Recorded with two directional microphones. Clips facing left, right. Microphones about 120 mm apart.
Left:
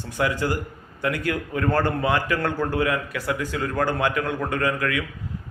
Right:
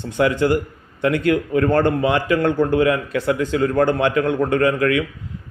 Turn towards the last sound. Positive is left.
turn(degrees=-25)  # may be behind; listen again after turning